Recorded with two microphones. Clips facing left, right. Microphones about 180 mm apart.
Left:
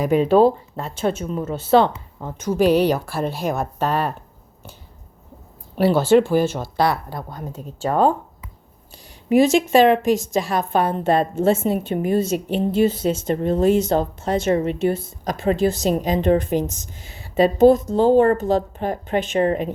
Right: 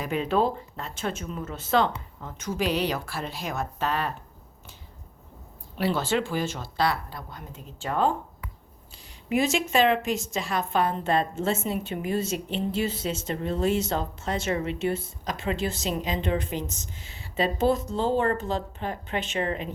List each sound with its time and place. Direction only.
0.0 s a woman's voice: 40° left (ahead or behind)
2.5 s speech: 50° left (ahead or behind)
5.7 s a woman's voice: 40° left (ahead or behind)
9.7 s a woman's voice: 40° left (ahead or behind)